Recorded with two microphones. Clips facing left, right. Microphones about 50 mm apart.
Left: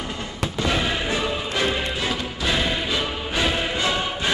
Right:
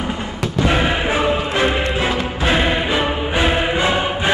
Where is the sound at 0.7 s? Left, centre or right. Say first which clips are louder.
Right 6 dB; right.